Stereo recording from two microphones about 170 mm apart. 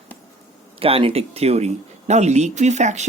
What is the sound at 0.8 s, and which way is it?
Speech, 35° right (ahead or behind).